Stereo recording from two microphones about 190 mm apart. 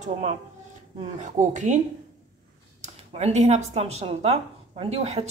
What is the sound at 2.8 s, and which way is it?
Speech, 35° right (ahead or behind).